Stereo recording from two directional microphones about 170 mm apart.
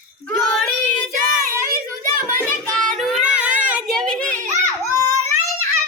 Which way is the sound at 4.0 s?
5° left (ahead or behind).